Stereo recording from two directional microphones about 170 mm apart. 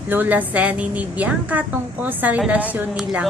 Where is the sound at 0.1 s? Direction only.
10° right (ahead or behind).